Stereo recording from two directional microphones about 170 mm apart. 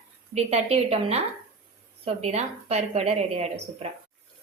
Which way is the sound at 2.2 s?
40° right (ahead or behind).